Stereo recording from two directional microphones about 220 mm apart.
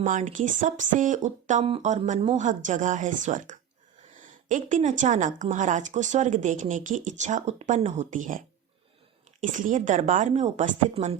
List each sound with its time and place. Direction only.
0.0 s a woman's voice: 35° right (ahead or behind)
9.4 s a woman's voice: 35° right (ahead or behind)